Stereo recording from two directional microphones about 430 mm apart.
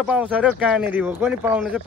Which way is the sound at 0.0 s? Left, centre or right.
Centre.